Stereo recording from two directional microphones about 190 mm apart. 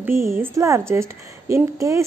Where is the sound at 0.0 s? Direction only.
15° right (ahead or behind).